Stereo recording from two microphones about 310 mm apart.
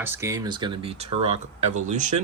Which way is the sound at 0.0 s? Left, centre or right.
Centre.